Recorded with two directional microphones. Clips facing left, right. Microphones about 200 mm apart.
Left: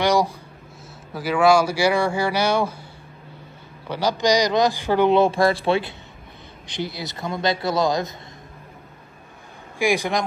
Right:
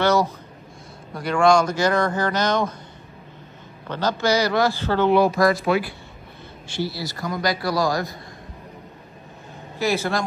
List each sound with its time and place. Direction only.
0.0 s speech: 15° left (ahead or behind)
3.8 s a man's voice: 10° left (ahead or behind)
9.8 s speech: 15° left (ahead or behind)